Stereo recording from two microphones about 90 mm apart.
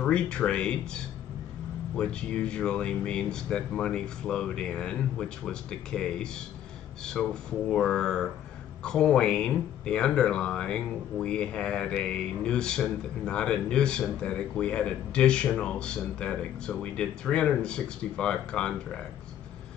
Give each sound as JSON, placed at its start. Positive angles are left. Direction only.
{"t": 0.0, "sound": "speech", "side_deg": 10}